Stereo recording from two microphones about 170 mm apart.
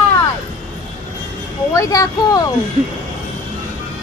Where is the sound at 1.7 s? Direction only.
20° left (ahead or behind).